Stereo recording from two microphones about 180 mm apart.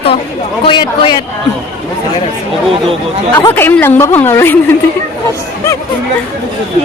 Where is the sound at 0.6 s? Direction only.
25° left (ahead or behind).